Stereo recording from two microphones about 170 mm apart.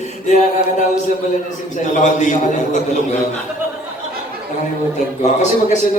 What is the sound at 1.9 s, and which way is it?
Speech, 45° left (ahead or behind).